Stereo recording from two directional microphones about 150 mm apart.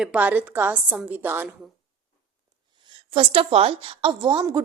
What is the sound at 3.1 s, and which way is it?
A woman's voice, 40° right (ahead or behind).